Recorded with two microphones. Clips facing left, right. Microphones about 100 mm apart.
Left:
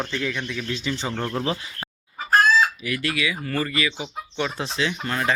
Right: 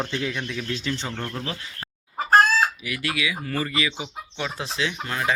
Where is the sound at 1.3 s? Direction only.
30° left (ahead or behind).